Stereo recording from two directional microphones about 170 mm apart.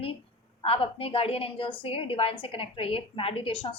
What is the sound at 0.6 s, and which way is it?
A woman's voice, 35° left (ahead or behind).